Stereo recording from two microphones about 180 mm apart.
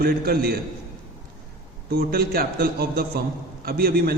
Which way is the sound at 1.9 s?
55° right (ahead or behind).